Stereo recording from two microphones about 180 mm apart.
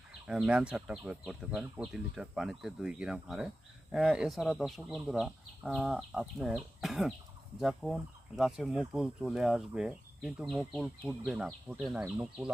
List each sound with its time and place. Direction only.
0.3 s speech: 5° right (ahead or behind)